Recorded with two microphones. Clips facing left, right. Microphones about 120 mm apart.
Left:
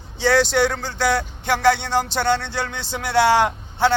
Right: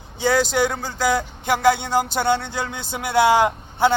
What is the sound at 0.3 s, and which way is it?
Speech, 5° right (ahead or behind).